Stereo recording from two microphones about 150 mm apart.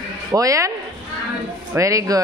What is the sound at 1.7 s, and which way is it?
Speech, 20° right (ahead or behind).